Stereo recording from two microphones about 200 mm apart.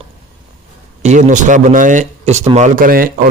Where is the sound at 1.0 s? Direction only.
35° right (ahead or behind).